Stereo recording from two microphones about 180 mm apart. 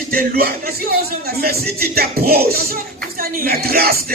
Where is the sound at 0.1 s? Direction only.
55° right (ahead or behind).